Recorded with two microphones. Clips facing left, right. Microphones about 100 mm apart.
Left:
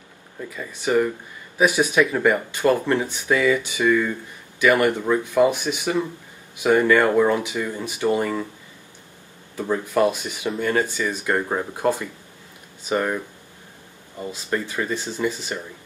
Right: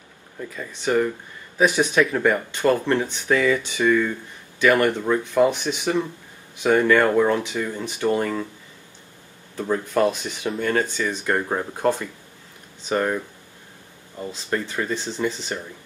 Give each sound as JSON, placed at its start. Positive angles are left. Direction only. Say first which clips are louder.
{"t": 0.4, "sound": "speech", "louder": "even", "side_deg": 5}
{"t": 9.6, "sound": "speech", "louder": "left 1 dB", "side_deg": 10}